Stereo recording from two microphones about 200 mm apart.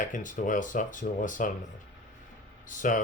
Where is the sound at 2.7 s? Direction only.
40° left (ahead or behind).